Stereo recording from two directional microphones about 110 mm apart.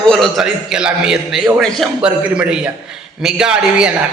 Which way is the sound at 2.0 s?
10° right (ahead or behind).